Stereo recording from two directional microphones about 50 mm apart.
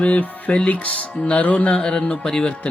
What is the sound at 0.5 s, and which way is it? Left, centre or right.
Speech, left.